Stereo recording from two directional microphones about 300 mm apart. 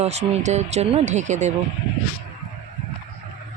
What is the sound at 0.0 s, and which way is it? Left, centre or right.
Speech, right.